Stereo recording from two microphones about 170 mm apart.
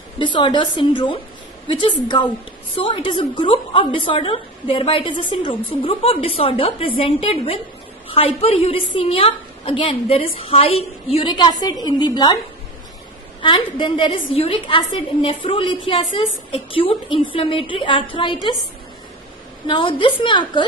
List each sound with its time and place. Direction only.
0.2 s a woman's voice: 25° left (ahead or behind)
13.4 s a woman's voice: 30° left (ahead or behind)
19.7 s a woman's voice: 30° left (ahead or behind)